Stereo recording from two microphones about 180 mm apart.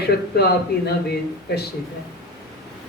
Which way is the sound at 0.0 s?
65° left (ahead or behind).